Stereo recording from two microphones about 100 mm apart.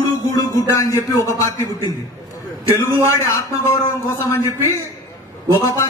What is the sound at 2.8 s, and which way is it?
Speech, 30° left (ahead or behind).